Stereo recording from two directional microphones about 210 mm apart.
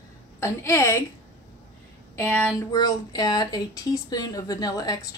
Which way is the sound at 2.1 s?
10° left (ahead or behind).